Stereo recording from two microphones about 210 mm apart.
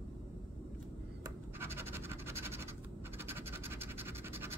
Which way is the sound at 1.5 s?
10° right (ahead or behind).